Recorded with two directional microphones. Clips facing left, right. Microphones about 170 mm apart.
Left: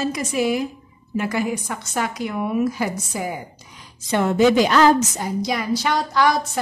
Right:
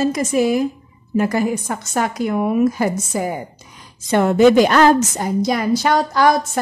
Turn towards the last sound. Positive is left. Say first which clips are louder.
# right 4 dB
turn(degrees=-45)  # may be behind; listen again after turning